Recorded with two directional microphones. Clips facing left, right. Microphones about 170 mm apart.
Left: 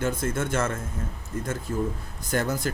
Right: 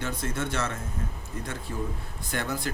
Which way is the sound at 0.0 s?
45° left (ahead or behind).